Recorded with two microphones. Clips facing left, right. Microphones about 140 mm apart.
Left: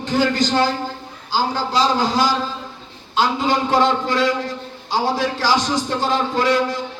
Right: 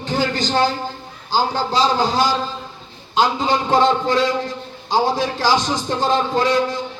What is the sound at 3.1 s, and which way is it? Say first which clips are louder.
Speech: right 1 dB; 20° right (ahead or behind).